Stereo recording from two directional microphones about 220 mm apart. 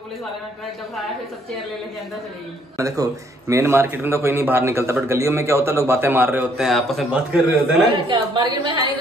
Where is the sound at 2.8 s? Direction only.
15° right (ahead or behind).